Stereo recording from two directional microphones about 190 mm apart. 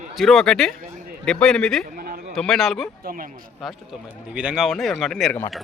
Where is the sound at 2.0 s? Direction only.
50° right (ahead or behind).